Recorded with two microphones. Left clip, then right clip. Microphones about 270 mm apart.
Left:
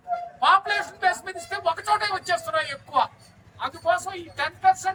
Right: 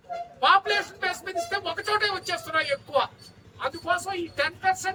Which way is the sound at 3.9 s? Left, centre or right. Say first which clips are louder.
Even; centre.